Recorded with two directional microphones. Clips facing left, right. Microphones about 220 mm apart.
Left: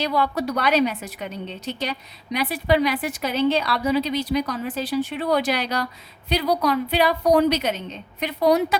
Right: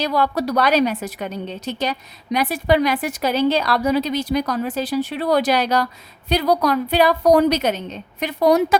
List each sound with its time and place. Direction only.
0.0 s a woman's voice: 40° right (ahead or behind)